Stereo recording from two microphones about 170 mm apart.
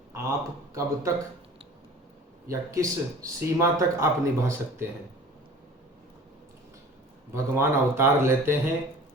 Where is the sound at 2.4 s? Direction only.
20° right (ahead or behind).